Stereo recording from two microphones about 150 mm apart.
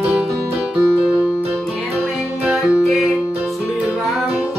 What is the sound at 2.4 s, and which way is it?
Music, 5° right (ahead or behind).